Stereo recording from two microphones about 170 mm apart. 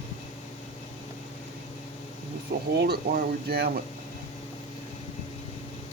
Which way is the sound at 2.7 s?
70° right (ahead or behind).